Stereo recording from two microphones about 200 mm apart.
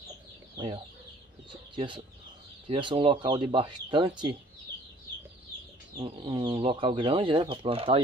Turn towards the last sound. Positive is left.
turn(degrees=-25)  # may be behind; listen again after turning